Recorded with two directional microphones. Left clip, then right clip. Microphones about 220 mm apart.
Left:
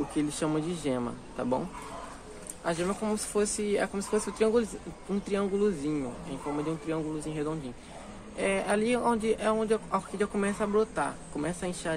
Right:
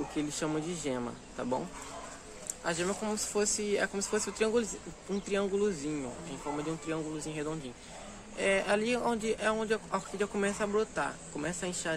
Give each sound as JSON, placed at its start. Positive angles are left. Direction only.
{"t": 0.1, "sound": "a man's voice", "side_deg": 5}
{"t": 2.6, "sound": "a man's voice", "side_deg": -10}